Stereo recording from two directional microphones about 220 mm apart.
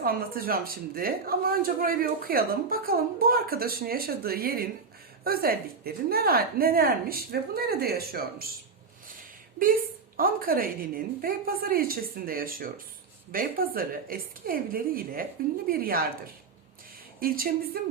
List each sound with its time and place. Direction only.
0.0 s speech: 40° right (ahead or behind)
9.0 s a sound: 40° right (ahead or behind)
10.2 s a woman's voice: 40° right (ahead or behind)